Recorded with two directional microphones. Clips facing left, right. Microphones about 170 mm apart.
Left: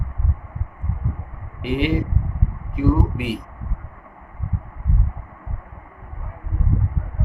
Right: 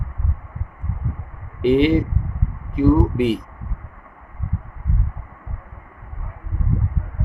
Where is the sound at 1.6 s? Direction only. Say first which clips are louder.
Right 6 dB; 30° right (ahead or behind).